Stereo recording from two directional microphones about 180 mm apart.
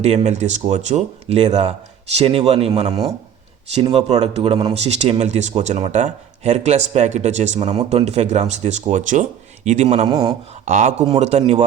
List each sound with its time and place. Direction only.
0.0 s speech: 40° right (ahead or behind)
10.1 s speech: 25° right (ahead or behind)
10.5 s speech: 40° right (ahead or behind)